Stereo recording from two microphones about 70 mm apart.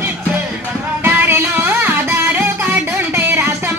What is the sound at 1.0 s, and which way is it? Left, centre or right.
Music, right.